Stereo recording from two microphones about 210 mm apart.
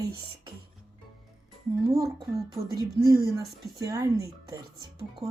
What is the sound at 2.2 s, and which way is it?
Speech, 15° right (ahead or behind).